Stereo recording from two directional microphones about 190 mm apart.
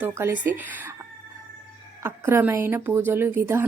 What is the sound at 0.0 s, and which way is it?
Speech, 15° right (ahead or behind).